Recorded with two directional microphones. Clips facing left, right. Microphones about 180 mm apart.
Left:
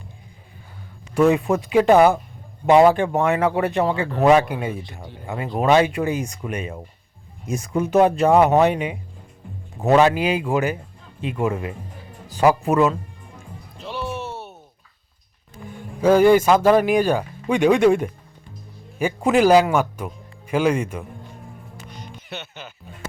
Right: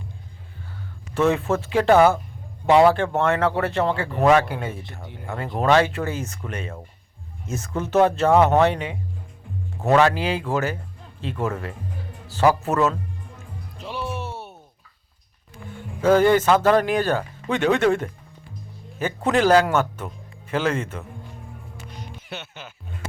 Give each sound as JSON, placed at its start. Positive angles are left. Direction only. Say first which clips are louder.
{"t": 1.1, "sound": "speech", "louder": "left 3 dB", "side_deg": 15}
{"t": 13.8, "sound": "music", "louder": "left 1 dB", "side_deg": -10}
{"t": 16.0, "sound": "speech", "louder": "left 3 dB", "side_deg": 10}
{"t": 22.3, "sound": "speech", "louder": "left 2 dB", "side_deg": -5}